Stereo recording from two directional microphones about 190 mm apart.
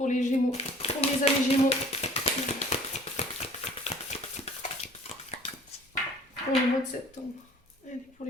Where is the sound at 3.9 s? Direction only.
30° left (ahead or behind).